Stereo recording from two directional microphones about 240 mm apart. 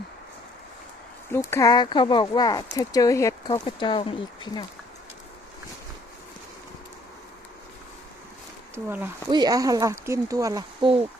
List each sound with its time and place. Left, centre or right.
1.3 s speech: centre
8.7 s speech: centre